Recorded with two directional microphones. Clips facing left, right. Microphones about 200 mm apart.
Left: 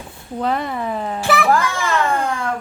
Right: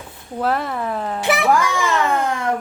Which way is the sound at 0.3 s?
5° right (ahead or behind).